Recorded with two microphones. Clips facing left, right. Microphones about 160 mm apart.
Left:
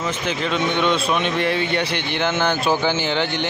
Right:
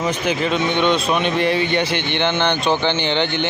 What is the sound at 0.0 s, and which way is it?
Speech, 10° right (ahead or behind).